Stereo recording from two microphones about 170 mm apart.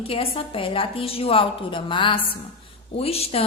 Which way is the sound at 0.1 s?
35° left (ahead or behind).